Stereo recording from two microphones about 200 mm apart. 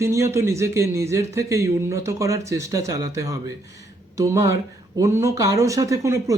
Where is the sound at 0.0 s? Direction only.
15° right (ahead or behind).